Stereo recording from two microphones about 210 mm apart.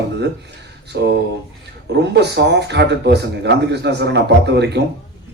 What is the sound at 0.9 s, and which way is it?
Speech, 55° right (ahead or behind).